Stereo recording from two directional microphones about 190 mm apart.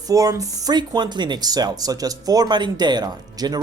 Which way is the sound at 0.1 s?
15° right (ahead or behind).